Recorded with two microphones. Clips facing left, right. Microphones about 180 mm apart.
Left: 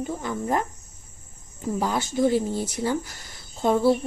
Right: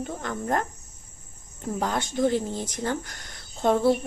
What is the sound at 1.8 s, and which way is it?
Speech, 5° left (ahead or behind).